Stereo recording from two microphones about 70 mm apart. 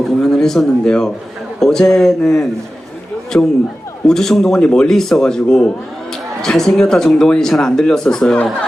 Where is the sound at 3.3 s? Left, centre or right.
Left.